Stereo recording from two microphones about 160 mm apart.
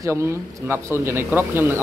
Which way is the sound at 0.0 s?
15° right (ahead or behind).